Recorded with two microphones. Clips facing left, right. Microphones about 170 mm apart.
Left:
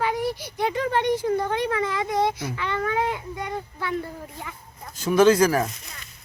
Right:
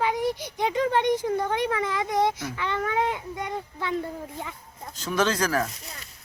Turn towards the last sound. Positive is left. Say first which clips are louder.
# left 7 dB
turn(degrees=10)  # may be behind; listen again after turning